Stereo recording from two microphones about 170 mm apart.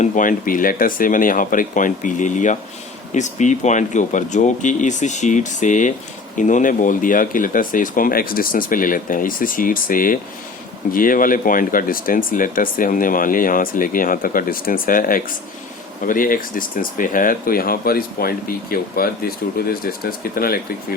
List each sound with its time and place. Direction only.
0.0 s speech: 50° left (ahead or behind)